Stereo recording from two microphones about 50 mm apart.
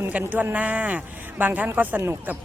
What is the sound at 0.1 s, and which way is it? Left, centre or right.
A woman's voice, right.